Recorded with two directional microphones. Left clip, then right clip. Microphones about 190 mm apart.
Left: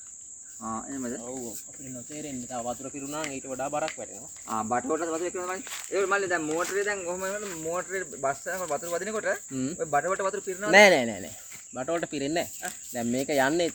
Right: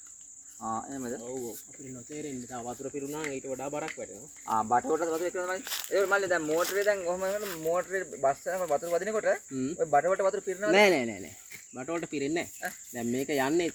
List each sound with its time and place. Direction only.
0.6 s cricket: centre (ahead or behind)
2.2 s cricket: 25° left (ahead or behind)
4.4 s cricket: centre (ahead or behind)
5.6 s speech: 45° right (ahead or behind)
5.9 s cricket: centre (ahead or behind)
6.7 s speech: 5° left (ahead or behind)
10.8 s speech: 45° left (ahead or behind)
11.7 s cricket: 40° left (ahead or behind)